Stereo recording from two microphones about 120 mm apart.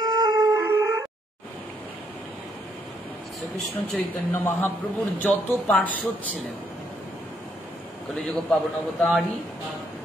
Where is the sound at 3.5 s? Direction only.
5° left (ahead or behind).